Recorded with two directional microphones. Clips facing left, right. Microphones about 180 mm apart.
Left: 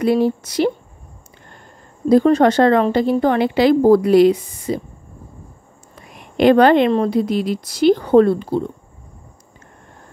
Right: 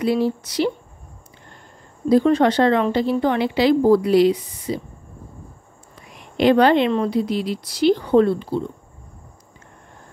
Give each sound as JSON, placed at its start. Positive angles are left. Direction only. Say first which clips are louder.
{"t": 0.0, "sound": "a woman's voice", "louder": "left 4 dB", "side_deg": 50}
{"t": 2.0, "sound": "a woman's voice", "louder": "left 3 dB", "side_deg": 45}
{"t": 6.1, "sound": "a woman's voice", "louder": "left 3 dB", "side_deg": 50}